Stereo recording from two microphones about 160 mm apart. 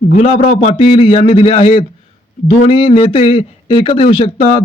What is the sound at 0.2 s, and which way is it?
A man's voice, 35° left (ahead or behind).